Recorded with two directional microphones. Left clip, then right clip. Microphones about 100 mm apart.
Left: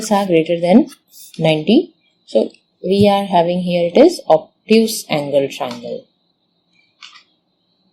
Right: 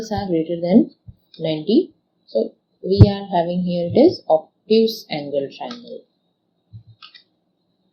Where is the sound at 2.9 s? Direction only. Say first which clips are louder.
Left 6 dB; 90° left.